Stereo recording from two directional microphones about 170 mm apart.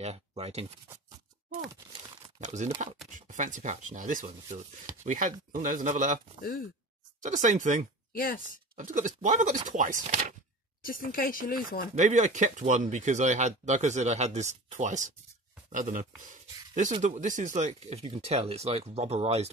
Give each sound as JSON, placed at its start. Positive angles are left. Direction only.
{"t": 0.0, "sound": "speech", "side_deg": -35}
{"t": 2.4, "sound": "speech", "side_deg": -45}
{"t": 7.2, "sound": "speech", "side_deg": -45}
{"t": 8.1, "sound": "speech", "side_deg": 60}
{"t": 8.7, "sound": "speech", "side_deg": -50}
{"t": 10.8, "sound": "speech", "side_deg": 55}
{"t": 11.9, "sound": "speech", "side_deg": -45}